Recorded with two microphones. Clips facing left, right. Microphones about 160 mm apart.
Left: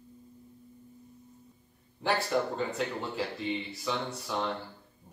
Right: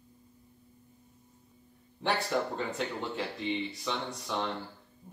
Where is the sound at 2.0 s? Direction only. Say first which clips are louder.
Left 2 dB; centre (ahead or behind).